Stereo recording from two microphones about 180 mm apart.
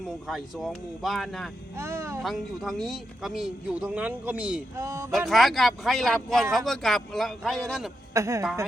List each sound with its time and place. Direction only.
0.3 s speech: centre (ahead or behind)
1.7 s speech: 15° right (ahead or behind)
2.2 s speech: centre (ahead or behind); by 5.0 s 15° right (ahead or behind)
5.3 s speech: centre (ahead or behind)
8.1 s speech: 20° right (ahead or behind)